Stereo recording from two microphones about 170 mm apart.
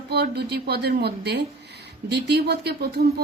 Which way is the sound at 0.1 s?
75° right (ahead or behind).